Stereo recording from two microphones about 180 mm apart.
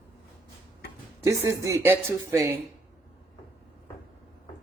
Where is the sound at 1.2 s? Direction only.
15° right (ahead or behind).